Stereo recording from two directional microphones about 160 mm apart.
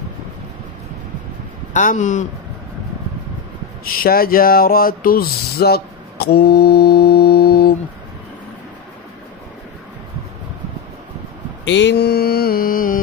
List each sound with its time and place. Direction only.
1.7 s a man's voice: 50° left (ahead or behind)
3.8 s a sound: 70° left (ahead or behind)
11.7 s mantra: 90° left; by 13.0 s 60° left (ahead or behind)